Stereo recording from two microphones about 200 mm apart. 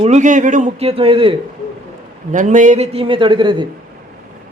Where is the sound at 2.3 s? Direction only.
40° right (ahead or behind); by 3.7 s 25° right (ahead or behind).